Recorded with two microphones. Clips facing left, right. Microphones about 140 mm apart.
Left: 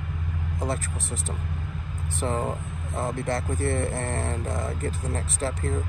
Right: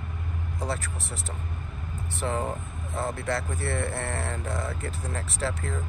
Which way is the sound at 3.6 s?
40° left (ahead or behind).